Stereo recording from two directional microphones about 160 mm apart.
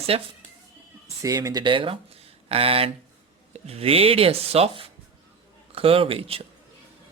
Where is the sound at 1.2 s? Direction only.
20° right (ahead or behind).